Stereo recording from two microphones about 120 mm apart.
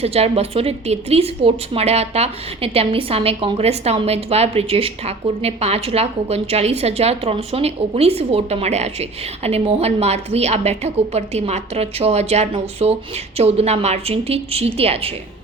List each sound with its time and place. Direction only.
0.0 s a woman's voice: 60° right (ahead or behind)